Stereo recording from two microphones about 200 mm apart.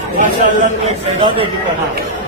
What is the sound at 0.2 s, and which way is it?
Speech, 40° right (ahead or behind).